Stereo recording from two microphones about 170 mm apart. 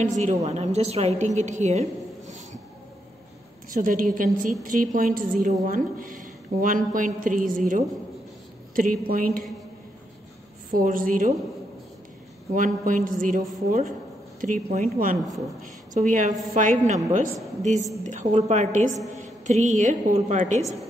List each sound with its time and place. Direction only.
0.2 s a woman's voice: 45° right (ahead or behind)
3.7 s a woman's voice: 55° right (ahead or behind)
10.7 s a woman's voice: 55° right (ahead or behind)
12.5 s a woman's voice: 50° right (ahead or behind)